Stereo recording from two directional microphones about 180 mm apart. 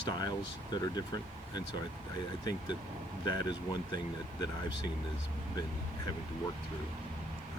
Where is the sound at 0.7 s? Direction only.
25° left (ahead or behind).